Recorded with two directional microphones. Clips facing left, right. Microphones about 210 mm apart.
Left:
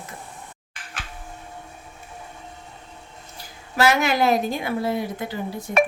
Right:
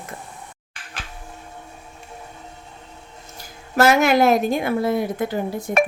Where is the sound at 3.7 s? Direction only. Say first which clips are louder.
Right 4 dB; 50° right (ahead or behind).